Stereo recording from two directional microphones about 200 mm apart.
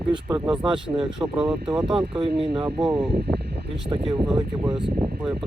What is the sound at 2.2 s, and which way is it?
Speech, 25° right (ahead or behind).